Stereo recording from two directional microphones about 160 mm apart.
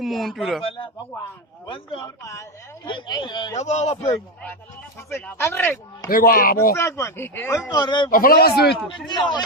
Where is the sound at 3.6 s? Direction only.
45° left (ahead or behind).